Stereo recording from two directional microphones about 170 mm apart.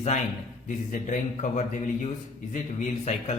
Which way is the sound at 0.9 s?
50° left (ahead or behind).